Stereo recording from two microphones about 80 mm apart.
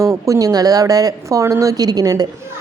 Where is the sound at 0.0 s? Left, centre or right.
Right.